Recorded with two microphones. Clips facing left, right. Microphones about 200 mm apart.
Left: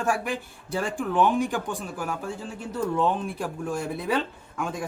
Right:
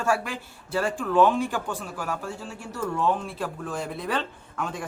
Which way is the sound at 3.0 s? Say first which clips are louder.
Right 1 dB; 15° left (ahead or behind).